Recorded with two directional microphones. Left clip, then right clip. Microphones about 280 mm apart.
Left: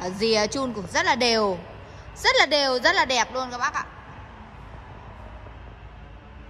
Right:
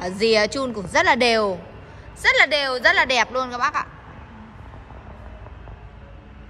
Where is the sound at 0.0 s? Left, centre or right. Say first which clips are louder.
Right 4 dB; centre.